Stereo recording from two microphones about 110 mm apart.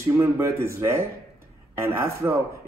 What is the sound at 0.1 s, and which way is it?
Speech, 20° right (ahead or behind).